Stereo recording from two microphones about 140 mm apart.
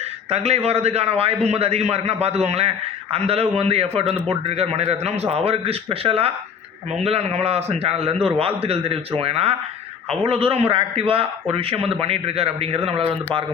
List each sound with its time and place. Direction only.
0.3 s a man's voice: 50° right (ahead or behind)